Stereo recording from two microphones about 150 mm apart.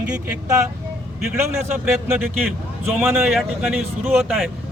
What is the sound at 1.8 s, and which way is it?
A man's voice, 15° right (ahead or behind).